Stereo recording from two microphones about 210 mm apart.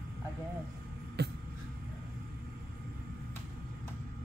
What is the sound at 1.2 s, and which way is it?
Vehicle, 50° right (ahead or behind).